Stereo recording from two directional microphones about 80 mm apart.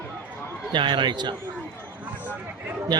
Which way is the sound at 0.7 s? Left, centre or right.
Right.